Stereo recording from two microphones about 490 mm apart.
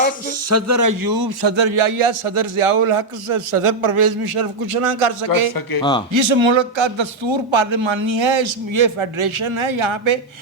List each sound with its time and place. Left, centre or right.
0.5 s a man's voice: right
6.1 s a man's voice: right